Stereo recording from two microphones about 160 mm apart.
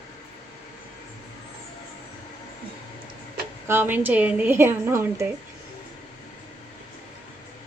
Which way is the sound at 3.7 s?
10° right (ahead or behind).